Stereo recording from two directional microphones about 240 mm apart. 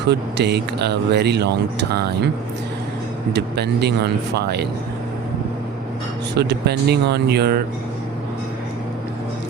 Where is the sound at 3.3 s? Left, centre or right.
Right.